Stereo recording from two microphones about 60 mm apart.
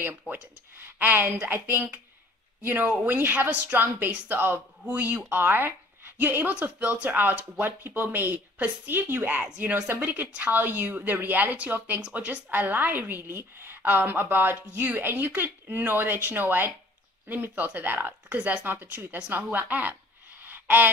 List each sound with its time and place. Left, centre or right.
0.3 s a woman's voice: right
3.8 s a woman's voice: right
20.4 s a sound: right